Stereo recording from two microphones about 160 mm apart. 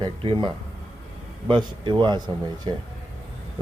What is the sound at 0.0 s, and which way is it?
A man's voice, 30° right (ahead or behind).